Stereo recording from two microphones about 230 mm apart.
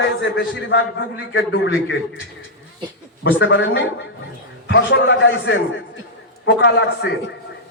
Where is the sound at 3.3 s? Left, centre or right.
Left.